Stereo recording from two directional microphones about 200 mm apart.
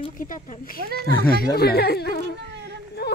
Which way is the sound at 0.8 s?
50° right (ahead or behind).